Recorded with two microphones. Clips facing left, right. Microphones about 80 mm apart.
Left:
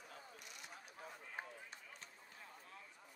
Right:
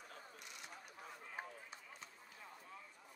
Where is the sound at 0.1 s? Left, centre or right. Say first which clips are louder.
Right 1 dB; right.